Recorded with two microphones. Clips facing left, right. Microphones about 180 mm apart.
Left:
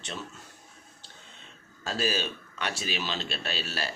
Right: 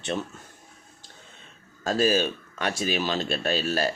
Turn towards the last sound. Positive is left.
turn(degrees=-45)  # may be behind; listen again after turning